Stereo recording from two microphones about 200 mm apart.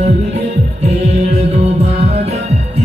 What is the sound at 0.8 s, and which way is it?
Music, 30° right (ahead or behind).